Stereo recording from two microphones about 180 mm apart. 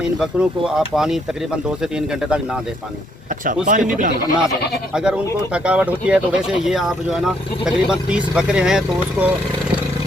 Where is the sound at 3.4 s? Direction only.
45° right (ahead or behind).